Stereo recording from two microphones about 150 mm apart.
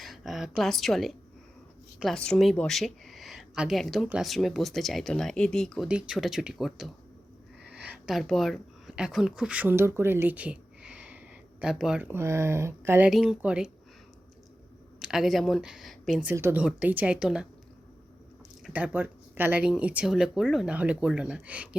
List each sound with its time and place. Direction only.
0.0 s a woman's voice: centre (ahead or behind); by 13.1 s 15° right (ahead or behind)
13.1 s speech: centre (ahead or behind)
14.9 s speech: 5° right (ahead or behind)
16.3 s speech: 15° right (ahead or behind)
18.6 s speech: 10° right (ahead or behind)